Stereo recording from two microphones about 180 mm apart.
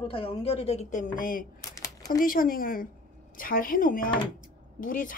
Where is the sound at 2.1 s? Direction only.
50° left (ahead or behind).